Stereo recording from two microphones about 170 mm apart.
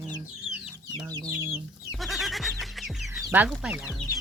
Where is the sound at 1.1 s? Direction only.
25° right (ahead or behind).